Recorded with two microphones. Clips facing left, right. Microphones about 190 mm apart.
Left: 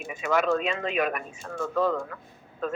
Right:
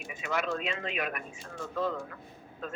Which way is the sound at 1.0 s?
85° left.